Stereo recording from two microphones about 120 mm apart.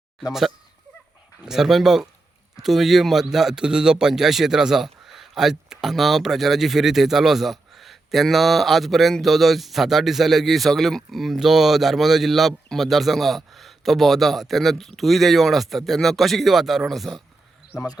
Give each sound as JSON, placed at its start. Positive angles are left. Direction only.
{"t": 1.5, "sound": "a man's voice", "side_deg": -5}